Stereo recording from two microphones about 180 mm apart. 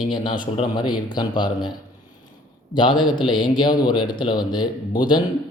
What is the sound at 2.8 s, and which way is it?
A man's voice, 25° left (ahead or behind).